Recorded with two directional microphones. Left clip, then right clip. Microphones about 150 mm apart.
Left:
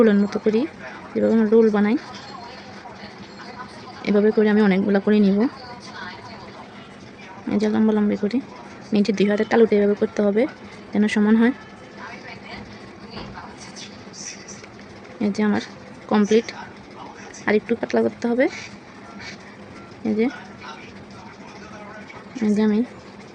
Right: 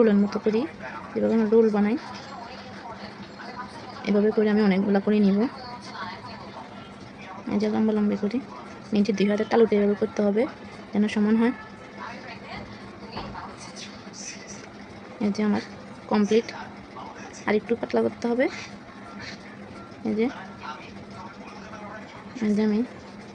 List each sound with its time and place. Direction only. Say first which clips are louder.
0.0 s speech: left 4 dB; 40° left (ahead or behind)
4.0 s speech: left 4 dB; 40° left (ahead or behind)
7.5 s speech: left 4 dB; 40° left (ahead or behind)
15.2 s speech: left 4 dB; 40° left (ahead or behind)
20.1 s speech: left 4 dB; 35° left (ahead or behind)
22.5 s speech: left 4 dB; 35° left (ahead or behind)